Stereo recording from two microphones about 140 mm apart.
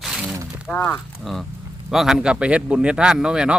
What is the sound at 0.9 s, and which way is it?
Speech, centre (ahead or behind).